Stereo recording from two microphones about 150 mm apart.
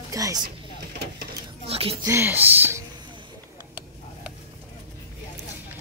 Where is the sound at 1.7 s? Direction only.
40° right (ahead or behind).